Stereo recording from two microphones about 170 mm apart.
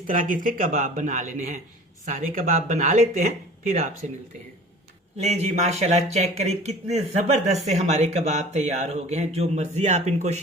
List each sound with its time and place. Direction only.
0.1 s speech: 50° right (ahead or behind)
5.1 s speech: 40° right (ahead or behind)